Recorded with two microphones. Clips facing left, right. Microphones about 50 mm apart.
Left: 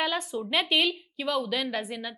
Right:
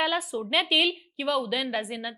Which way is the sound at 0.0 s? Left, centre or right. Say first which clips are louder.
Right 2 dB; centre.